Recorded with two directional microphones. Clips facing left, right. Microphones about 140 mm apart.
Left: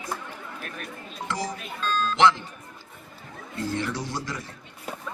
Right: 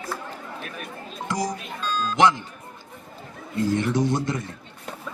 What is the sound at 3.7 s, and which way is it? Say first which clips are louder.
Speech: right 8 dB; 20° right (ahead or behind).